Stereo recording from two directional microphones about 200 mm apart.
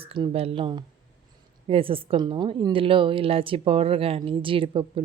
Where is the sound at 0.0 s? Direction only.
25° right (ahead or behind).